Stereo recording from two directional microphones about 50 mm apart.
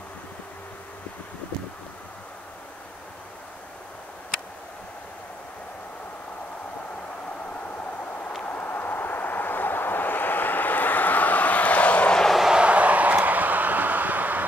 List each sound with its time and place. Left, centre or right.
8.5 s vehicle: left
12.3 s vehicle: centre
12.5 s a sound: right